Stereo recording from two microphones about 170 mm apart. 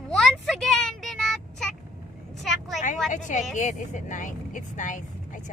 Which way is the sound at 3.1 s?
45° left (ahead or behind).